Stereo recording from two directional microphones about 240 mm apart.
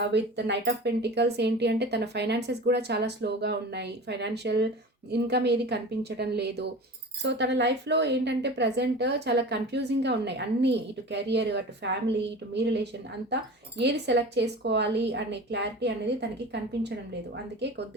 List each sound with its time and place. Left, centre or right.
0.0 s speech: right